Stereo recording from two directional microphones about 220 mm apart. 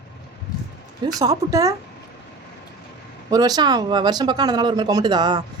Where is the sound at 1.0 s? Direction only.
15° right (ahead or behind).